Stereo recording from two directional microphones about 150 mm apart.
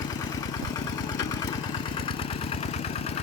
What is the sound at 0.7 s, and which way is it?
Vehicle, 25° left (ahead or behind).